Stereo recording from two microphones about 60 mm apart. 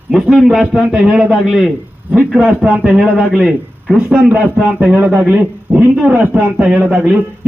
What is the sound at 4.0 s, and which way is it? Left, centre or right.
A man's voice, right.